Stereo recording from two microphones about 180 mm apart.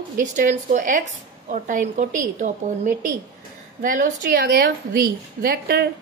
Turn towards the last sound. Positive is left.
turn(degrees=-60)  # may be behind; listen again after turning